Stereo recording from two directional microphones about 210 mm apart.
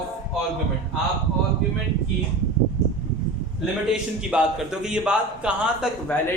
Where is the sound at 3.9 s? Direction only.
5° right (ahead or behind).